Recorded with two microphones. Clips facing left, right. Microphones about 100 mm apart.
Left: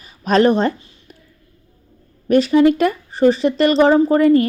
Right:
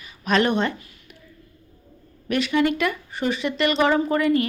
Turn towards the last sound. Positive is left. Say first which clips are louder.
# left 8 dB
turn(degrees=40)  # may be behind; listen again after turning